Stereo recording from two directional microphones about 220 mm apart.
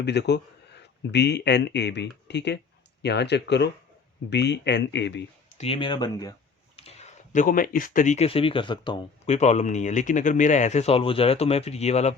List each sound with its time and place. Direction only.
0.0 s speech: 50° left (ahead or behind)
5.5 s speech: 25° left (ahead or behind)
6.7 s speech: 30° left (ahead or behind)